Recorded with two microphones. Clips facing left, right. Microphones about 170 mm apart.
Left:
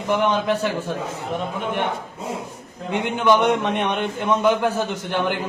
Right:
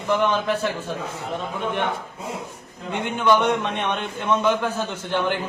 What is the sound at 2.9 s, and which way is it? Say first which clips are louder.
A man's voice: left 2 dB; 15° left (ahead or behind).